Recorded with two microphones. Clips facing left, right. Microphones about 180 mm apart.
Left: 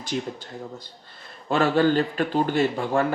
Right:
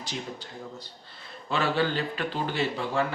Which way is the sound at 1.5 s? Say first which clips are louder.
Left 7 dB; 45° left (ahead or behind).